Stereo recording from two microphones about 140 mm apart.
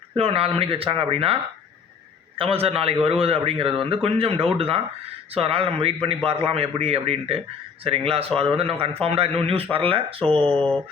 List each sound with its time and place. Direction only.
0.1 s a man's voice: 45° right (ahead or behind)
2.4 s a man's voice: 45° right (ahead or behind)
10.2 s speech: 10° left (ahead or behind)